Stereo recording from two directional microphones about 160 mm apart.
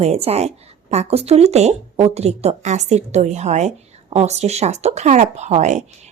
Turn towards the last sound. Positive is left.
turn(degrees=-45)  # may be behind; listen again after turning